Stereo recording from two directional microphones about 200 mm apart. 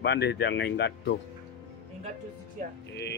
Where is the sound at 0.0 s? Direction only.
55° left (ahead or behind).